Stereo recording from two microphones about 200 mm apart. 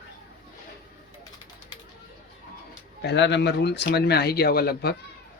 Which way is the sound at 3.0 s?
60° left (ahead or behind).